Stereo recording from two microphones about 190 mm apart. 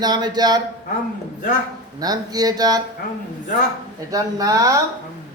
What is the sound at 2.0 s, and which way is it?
Speech, 20° right (ahead or behind).